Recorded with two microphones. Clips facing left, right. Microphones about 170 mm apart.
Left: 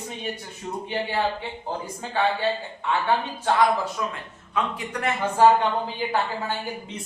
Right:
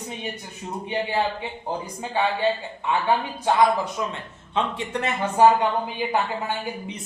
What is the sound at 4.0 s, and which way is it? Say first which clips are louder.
Speech: right 1 dB; 25° right (ahead or behind).